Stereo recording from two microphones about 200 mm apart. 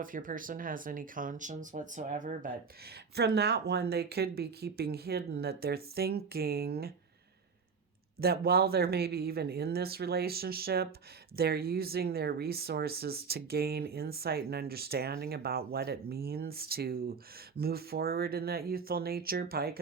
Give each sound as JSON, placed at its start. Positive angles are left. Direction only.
{"t": 0.0, "sound": "speech", "side_deg": -40}
{"t": 3.2, "sound": "speech", "side_deg": -55}
{"t": 8.2, "sound": "speech", "side_deg": -50}